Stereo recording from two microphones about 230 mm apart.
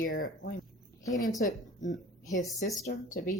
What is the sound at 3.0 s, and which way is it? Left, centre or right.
Speech, left.